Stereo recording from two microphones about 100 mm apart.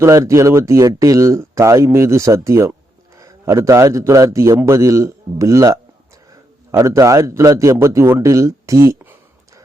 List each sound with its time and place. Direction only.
0.0 s a man's voice: 30° right (ahead or behind)